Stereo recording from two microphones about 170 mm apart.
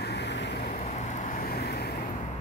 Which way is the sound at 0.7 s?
45° left (ahead or behind).